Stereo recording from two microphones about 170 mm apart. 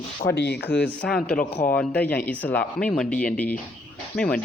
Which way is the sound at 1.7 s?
10° left (ahead or behind).